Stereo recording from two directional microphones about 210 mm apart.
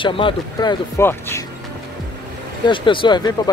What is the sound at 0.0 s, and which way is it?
Speech, 25° left (ahead or behind).